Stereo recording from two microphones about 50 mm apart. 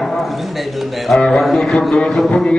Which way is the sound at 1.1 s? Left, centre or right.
Centre.